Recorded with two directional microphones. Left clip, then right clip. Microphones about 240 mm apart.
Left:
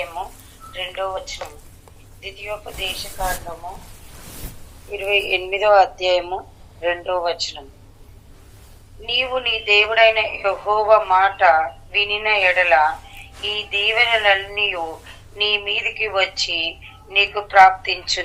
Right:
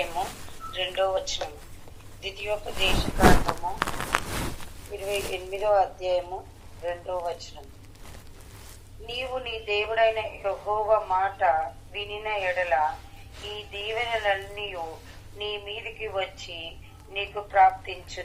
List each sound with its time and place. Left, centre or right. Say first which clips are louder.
0.7 s speech: left 1 dB; right
4.9 s a woman's voice: left 11 dB; left
9.0 s a woman's voice: left 12 dB; left